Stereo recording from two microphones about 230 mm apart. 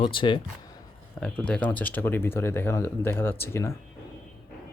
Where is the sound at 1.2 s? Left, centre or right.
Centre.